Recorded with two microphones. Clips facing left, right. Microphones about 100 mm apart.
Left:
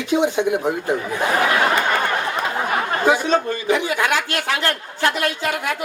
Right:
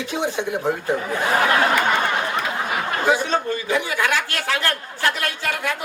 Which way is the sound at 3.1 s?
20° left (ahead or behind).